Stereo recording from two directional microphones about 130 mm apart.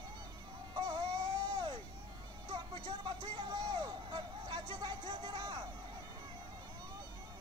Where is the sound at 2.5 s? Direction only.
35° right (ahead or behind).